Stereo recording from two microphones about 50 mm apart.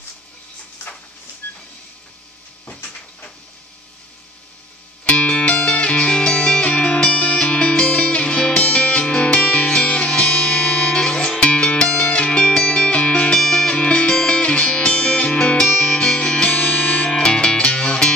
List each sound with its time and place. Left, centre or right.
1.4 s printer: left
5.0 s music: left
13.4 s music: centre